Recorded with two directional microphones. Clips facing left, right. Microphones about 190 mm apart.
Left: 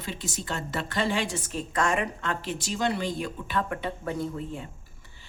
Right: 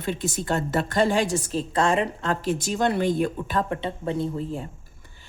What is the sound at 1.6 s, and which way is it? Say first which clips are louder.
Speech: right 3 dB; 30° right (ahead or behind).